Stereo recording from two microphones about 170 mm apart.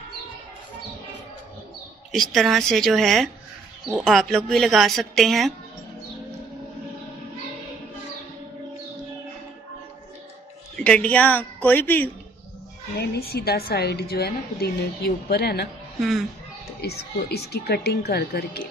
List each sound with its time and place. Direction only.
2.1 s speech: centre (ahead or behind)
10.8 s a woman's voice: 5° left (ahead or behind)
12.9 s a woman's voice: 70° left (ahead or behind)
16.0 s speech: centre (ahead or behind)
16.8 s a woman's voice: 70° left (ahead or behind)